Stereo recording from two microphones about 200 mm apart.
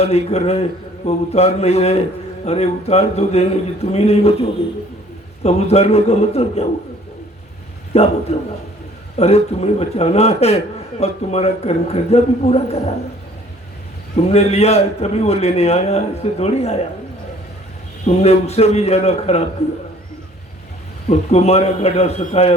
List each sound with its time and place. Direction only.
0.0 s a man's voice: 30° left (ahead or behind)
7.9 s a man's voice: 30° left (ahead or behind)
14.2 s a man's voice: 30° left (ahead or behind)
18.0 s a man's voice: 35° left (ahead or behind)
21.1 s a man's voice: 35° left (ahead or behind)